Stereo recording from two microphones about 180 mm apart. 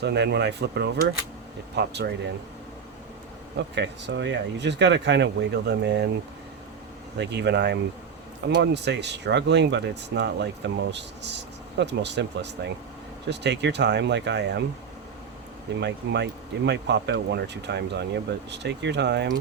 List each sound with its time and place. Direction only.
0.0 s speech: 70° right (ahead or behind)
3.8 s speech: 75° right (ahead or behind)
7.2 s speech: 70° right (ahead or behind)
15.8 s speech: 70° right (ahead or behind)